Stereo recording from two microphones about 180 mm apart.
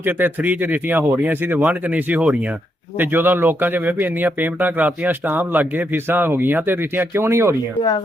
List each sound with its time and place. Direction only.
0.0 s speech: 10° right (ahead or behind)
7.8 s speech: 25° left (ahead or behind)